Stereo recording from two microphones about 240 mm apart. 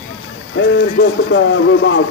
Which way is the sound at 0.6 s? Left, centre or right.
Left.